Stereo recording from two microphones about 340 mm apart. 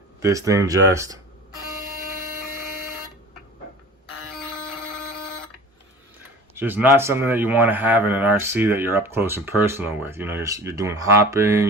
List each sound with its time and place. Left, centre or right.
0.2 s a man's voice: centre
6.5 s a man's voice: centre